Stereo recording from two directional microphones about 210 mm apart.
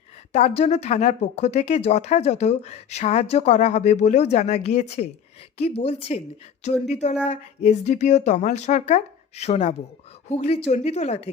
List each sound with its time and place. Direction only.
0.3 s a woman's voice: 30° left (ahead or behind)